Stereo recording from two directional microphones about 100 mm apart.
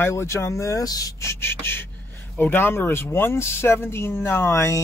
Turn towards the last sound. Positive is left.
turn(degrees=30)  # may be behind; listen again after turning